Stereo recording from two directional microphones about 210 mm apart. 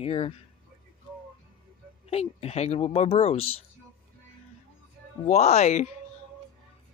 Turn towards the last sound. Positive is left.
turn(degrees=35)  # may be behind; listen again after turning